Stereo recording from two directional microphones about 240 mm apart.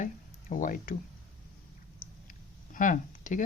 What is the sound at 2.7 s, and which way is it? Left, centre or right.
Speech, left.